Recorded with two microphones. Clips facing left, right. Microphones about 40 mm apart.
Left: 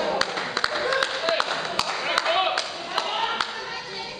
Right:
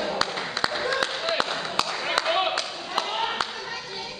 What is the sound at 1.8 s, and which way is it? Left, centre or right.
Clapping, centre.